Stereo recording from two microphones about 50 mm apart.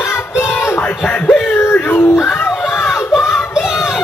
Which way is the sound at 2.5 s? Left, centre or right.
Centre.